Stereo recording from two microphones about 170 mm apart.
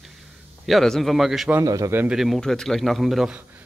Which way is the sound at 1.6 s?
20° right (ahead or behind).